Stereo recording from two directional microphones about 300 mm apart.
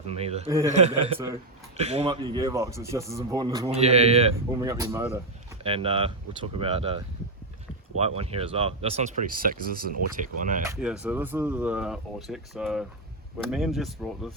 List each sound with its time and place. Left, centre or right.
0.1 s a man's voice: centre
5.6 s a man's voice: centre
10.7 s speech: centre